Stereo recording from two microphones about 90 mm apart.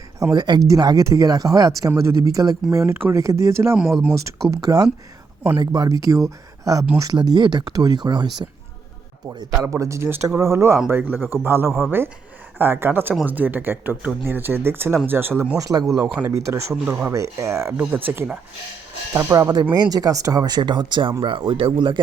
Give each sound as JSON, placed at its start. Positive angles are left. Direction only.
{"t": 0.3, "sound": "speech", "side_deg": -50}
{"t": 2.7, "sound": "speech", "side_deg": -30}
{"t": 3.8, "sound": "speech", "side_deg": -5}
{"t": 4.1, "sound": "speech", "side_deg": -35}
{"t": 9.6, "sound": "speech", "side_deg": -35}
{"t": 15.5, "sound": "speech", "side_deg": -40}
{"t": 16.0, "sound": "speech", "side_deg": -10}
{"t": 16.3, "sound": "speech", "side_deg": -35}
{"t": 17.7, "sound": "speech", "side_deg": -20}
{"t": 19.3, "sound": "speech", "side_deg": -40}
{"t": 21.7, "sound": "speech", "side_deg": -60}